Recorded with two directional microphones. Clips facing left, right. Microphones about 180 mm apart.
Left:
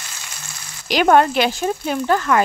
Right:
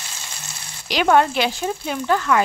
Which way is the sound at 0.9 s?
50° left (ahead or behind).